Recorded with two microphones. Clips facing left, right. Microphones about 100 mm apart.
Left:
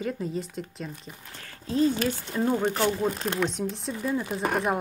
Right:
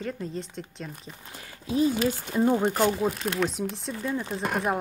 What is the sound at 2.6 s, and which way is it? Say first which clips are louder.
Speech: right 1 dB; 5° right (ahead or behind).